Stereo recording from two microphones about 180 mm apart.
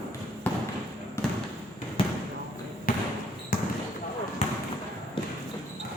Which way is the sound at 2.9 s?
50° left (ahead or behind).